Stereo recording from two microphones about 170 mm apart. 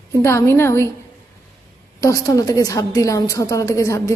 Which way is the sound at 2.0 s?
20° left (ahead or behind).